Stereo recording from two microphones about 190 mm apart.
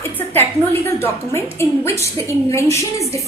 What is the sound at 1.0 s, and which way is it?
A woman's voice, 15° left (ahead or behind).